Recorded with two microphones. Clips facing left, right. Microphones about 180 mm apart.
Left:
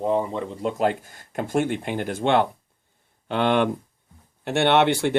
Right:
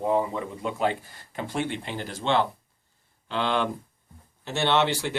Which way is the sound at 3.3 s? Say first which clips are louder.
Left 6 dB; 60° left (ahead or behind).